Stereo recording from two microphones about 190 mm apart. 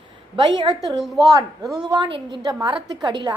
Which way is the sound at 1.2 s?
20° right (ahead or behind).